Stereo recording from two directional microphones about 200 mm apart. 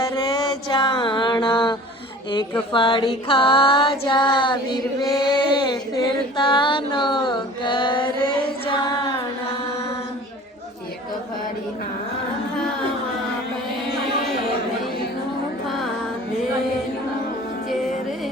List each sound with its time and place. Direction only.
0.0 s music: 20° left (ahead or behind)
2.3 s female singing: 20° left (ahead or behind)
8.6 s child singing: 20° left (ahead or behind)